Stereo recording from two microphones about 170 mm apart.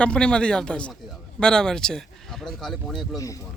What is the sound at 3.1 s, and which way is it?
Speech, 20° left (ahead or behind).